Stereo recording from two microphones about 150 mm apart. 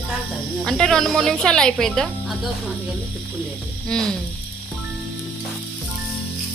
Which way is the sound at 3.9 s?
5° left (ahead or behind).